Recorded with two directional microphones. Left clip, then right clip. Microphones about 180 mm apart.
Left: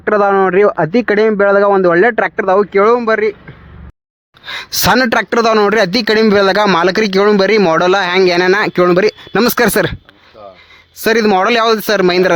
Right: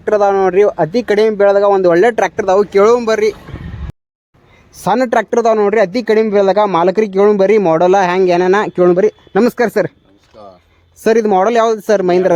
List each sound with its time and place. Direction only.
0.0 s speech: 5° left (ahead or behind)
4.9 s speech: 20° left (ahead or behind)
5.5 s speech: 30° left (ahead or behind)
11.0 s speech: 10° left (ahead or behind)